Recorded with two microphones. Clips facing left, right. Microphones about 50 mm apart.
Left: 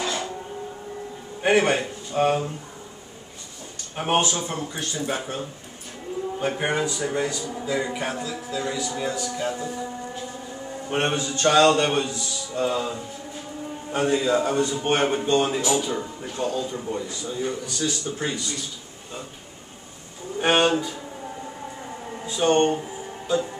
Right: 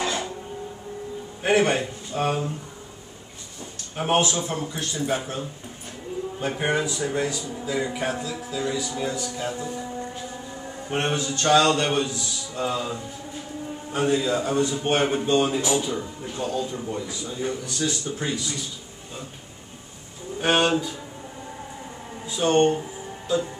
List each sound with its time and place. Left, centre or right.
0.0 s a sound: centre
1.4 s speech: centre
3.9 s speech: centre
9.5 s speech: centre
10.9 s speech: centre
14.0 s speech: centre
18.1 s speech: centre
20.3 s speech: centre
22.2 s speech: centre
22.6 s music: centre